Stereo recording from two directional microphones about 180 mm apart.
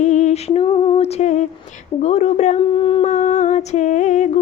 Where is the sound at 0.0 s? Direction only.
40° left (ahead or behind).